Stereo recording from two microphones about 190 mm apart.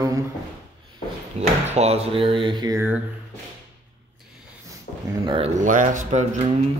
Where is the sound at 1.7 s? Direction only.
35° right (ahead or behind).